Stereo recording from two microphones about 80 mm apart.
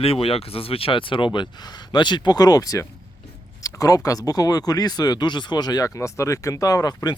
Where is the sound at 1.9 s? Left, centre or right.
Left.